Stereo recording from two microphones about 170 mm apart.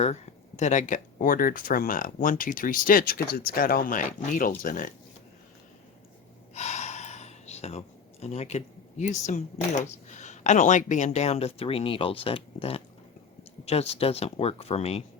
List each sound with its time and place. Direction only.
0.0 s speech: 45° left (ahead or behind)
6.5 s gasp: 40° left (ahead or behind)
10.1 s speech: 45° left (ahead or behind)